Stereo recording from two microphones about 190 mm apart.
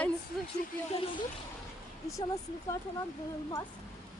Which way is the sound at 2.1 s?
15° left (ahead or behind).